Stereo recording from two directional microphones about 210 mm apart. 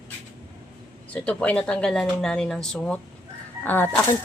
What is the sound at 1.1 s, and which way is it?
Speech, 5° left (ahead or behind).